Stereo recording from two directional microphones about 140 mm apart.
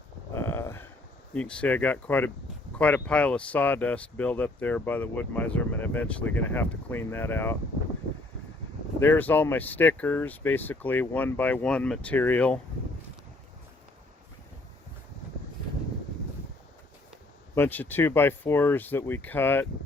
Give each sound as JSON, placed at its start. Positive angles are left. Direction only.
{"t": 0.3, "sound": "a sound", "side_deg": 15}
{"t": 1.3, "sound": "speech", "side_deg": 5}
{"t": 9.0, "sound": "speech", "side_deg": 15}
{"t": 17.5, "sound": "speech", "side_deg": 15}